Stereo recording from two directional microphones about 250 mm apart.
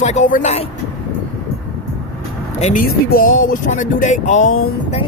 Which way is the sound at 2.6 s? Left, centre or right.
Left.